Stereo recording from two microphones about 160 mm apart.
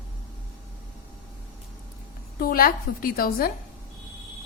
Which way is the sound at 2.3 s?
65° left (ahead or behind).